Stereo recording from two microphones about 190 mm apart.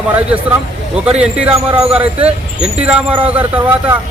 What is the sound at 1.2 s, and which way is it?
Speech, 5° right (ahead or behind).